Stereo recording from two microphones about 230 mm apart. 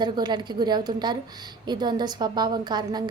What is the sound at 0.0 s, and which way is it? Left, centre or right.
A woman's voice, centre.